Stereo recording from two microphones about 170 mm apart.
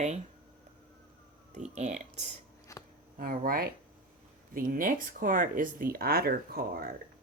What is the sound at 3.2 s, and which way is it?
Speech, 60° right (ahead or behind).